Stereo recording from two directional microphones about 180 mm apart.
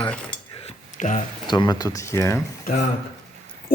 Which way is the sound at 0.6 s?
40° left (ahead or behind).